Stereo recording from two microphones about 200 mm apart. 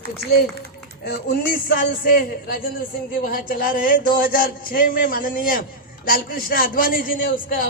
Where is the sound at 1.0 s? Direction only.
45° left (ahead or behind).